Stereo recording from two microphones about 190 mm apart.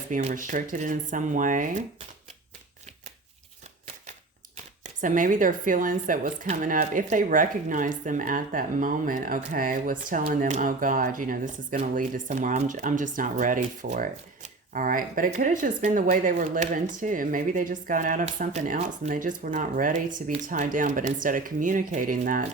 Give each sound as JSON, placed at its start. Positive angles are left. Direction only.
{"t": 0.1, "sound": "speech", "side_deg": -45}
{"t": 4.5, "sound": "speech", "side_deg": -40}